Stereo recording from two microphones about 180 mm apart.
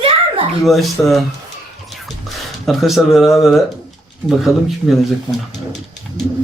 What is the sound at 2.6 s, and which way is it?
Speech, centre (ahead or behind).